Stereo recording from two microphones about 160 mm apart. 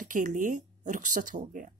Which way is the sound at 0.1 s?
55° right (ahead or behind).